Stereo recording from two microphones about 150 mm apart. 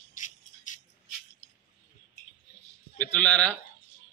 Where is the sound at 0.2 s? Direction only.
60° left (ahead or behind).